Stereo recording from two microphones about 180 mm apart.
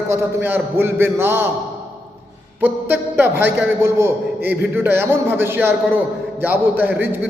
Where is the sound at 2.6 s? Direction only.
10° right (ahead or behind).